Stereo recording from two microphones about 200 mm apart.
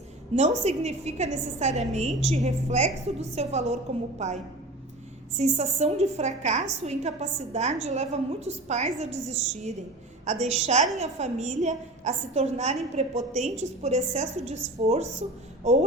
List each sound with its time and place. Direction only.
0.3 s a woman's voice: 35° right (ahead or behind)
5.4 s a woman's voice: 35° right (ahead or behind)